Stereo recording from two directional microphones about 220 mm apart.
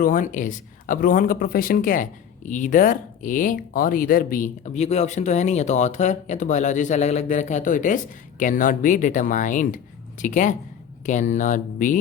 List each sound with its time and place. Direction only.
0.0 s speech: 35° left (ahead or behind)